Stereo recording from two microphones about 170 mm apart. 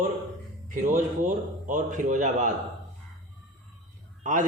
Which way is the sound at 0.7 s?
50° right (ahead or behind).